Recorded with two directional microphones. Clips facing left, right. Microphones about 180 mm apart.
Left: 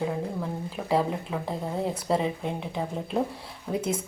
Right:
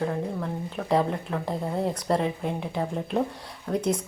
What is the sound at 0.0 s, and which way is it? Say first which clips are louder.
Speech: right 1 dB; 5° left (ahead or behind).